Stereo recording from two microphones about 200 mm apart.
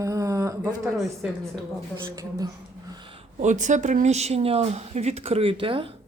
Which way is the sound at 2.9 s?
25° right (ahead or behind).